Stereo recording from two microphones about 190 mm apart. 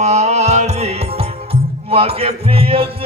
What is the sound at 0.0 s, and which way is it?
Music, 35° right (ahead or behind).